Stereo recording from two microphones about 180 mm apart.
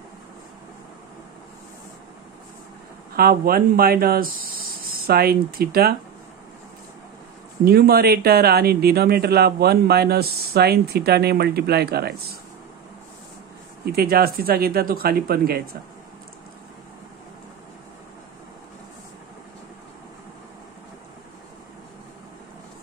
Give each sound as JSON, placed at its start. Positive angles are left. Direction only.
{"t": 3.2, "sound": "speech", "side_deg": -55}
{"t": 7.6, "sound": "speech", "side_deg": -55}
{"t": 13.8, "sound": "speech", "side_deg": -60}